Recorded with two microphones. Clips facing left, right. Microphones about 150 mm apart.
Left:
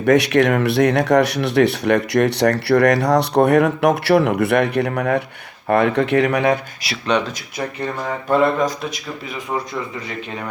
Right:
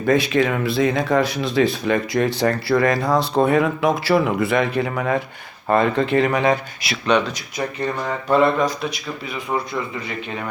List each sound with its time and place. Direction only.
0.0 s speech: 70° left (ahead or behind)
6.8 s speech: 35° left (ahead or behind)
8.0 s speech: 45° left (ahead or behind)